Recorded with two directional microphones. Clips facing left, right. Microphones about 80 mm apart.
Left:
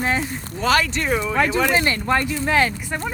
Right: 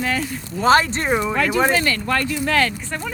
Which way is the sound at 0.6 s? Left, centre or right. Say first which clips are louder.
Right 4 dB; right.